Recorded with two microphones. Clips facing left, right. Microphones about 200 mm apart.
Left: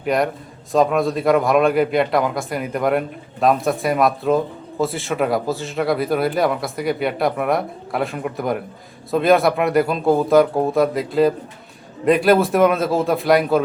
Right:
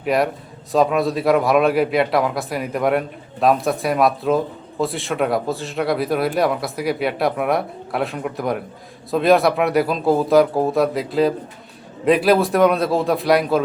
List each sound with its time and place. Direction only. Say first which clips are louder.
0.0 s a man's voice: even; centre (ahead or behind)